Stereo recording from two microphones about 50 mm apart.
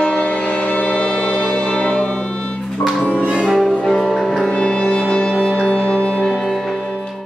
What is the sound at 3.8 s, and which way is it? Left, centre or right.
Music, centre.